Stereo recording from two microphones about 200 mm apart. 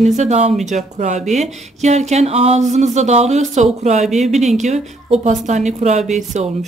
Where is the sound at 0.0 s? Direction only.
35° right (ahead or behind).